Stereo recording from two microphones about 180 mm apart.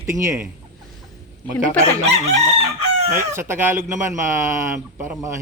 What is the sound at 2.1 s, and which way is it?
Chicken, 35° right (ahead or behind).